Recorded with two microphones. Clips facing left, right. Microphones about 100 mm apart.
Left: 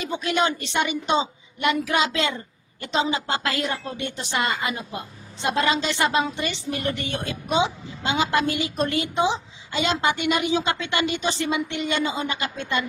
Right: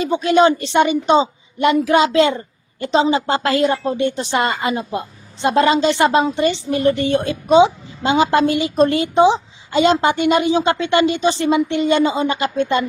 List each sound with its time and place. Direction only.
0.0 s a woman's voice: 30° right (ahead or behind)